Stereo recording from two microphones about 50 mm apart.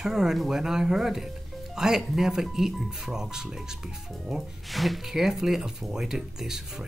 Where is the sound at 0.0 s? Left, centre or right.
Centre.